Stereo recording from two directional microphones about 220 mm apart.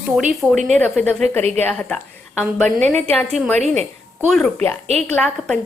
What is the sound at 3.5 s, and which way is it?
Speech, 30° right (ahead or behind).